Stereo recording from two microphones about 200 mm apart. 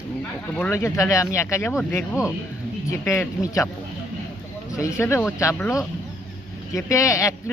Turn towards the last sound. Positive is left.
turn(degrees=15)  # may be behind; listen again after turning